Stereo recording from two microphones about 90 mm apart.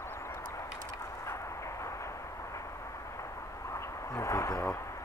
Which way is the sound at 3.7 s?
35° left (ahead or behind).